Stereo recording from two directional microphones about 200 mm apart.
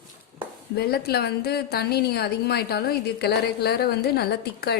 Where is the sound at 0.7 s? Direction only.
55° left (ahead or behind).